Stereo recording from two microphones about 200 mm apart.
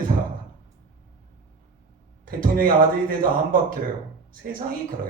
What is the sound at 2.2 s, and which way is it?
Speech, 45° right (ahead or behind).